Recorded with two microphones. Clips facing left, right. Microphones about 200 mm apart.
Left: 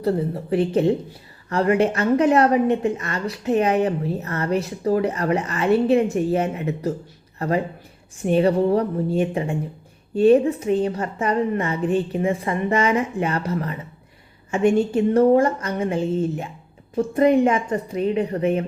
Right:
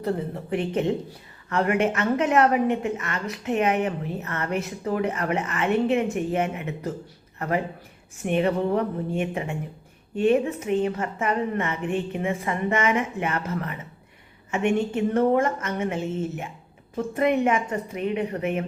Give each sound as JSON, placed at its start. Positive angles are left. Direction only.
{"t": 0.5, "sound": "a woman's voice", "side_deg": 35}